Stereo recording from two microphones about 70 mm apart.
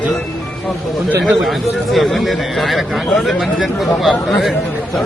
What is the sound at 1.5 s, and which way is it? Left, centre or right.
Speech, centre.